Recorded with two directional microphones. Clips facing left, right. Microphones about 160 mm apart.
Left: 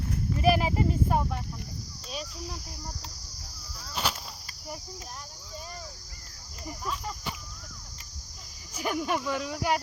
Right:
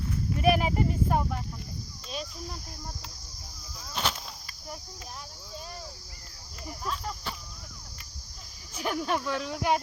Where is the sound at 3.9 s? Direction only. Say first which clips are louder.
Even; 5° left (ahead or behind).